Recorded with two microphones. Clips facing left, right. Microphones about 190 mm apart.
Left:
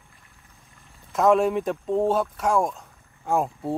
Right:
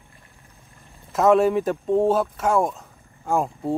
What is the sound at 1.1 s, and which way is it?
Speech, centre (ahead or behind).